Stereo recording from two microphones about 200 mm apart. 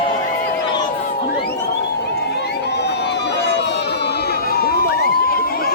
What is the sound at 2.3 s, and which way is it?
Run, 55° left (ahead or behind).